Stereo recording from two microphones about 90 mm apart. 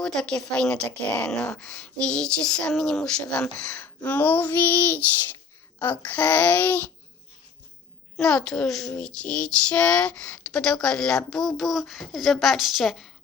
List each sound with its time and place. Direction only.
0.0 s a woman's voice: 5° left (ahead or behind)
3.8 s child singing: 20° left (ahead or behind)
5.8 s a woman's voice: 20° left (ahead or behind)
8.2 s a woman's voice: 10° left (ahead or behind)